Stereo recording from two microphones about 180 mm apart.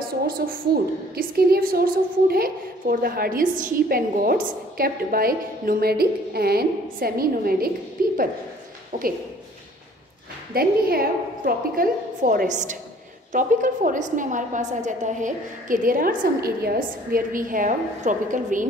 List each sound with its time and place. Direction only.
1.1 s a woman's voice: 60° right (ahead or behind)
10.5 s a woman's voice: 60° right (ahead or behind)